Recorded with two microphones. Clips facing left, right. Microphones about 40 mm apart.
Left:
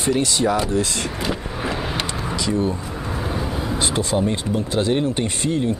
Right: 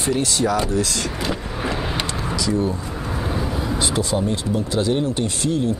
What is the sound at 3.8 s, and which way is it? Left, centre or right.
Speech, left.